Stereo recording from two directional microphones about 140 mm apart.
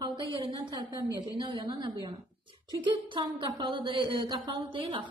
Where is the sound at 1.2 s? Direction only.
35° right (ahead or behind).